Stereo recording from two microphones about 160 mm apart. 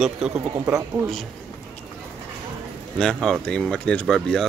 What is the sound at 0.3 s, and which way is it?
Speech, 15° right (ahead or behind).